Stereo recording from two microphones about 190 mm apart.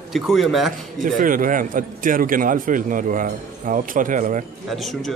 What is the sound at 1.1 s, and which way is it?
A man's voice, 45° right (ahead or behind).